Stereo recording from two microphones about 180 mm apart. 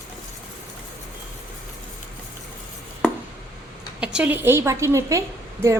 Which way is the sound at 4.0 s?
5° right (ahead or behind).